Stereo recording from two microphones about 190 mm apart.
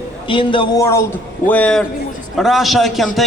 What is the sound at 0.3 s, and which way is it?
Speech, 25° left (ahead or behind).